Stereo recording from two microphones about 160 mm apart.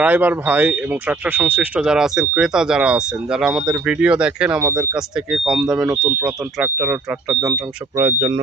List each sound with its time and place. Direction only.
0.0 s speech: 10° right (ahead or behind)
7.9 s speech: 25° right (ahead or behind)